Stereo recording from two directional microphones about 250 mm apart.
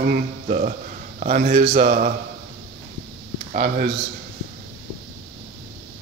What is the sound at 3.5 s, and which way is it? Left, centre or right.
Speech, right.